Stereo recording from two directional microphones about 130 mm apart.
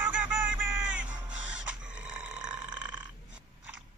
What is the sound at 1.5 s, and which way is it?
Chicken, 5° right (ahead or behind).